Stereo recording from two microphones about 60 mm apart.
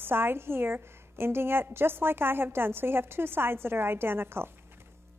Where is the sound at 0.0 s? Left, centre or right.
Right.